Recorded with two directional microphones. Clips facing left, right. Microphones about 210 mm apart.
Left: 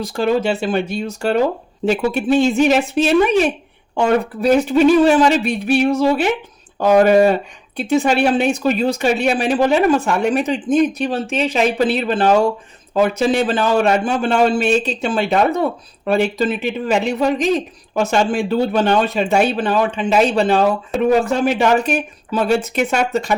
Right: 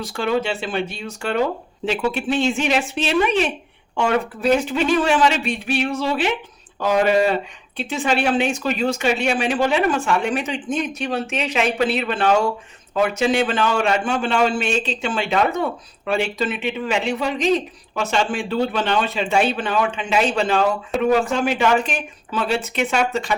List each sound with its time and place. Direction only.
0.1 s speech: 40° left (ahead or behind)